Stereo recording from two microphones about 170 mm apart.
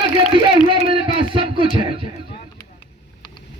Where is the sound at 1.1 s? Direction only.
30° right (ahead or behind).